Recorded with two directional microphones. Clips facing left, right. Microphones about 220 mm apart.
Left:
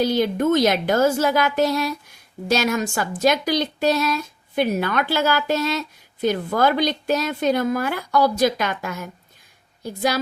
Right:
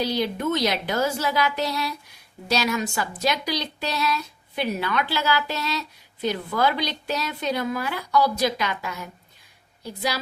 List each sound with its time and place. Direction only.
0.0 s a woman's voice: 50° left (ahead or behind)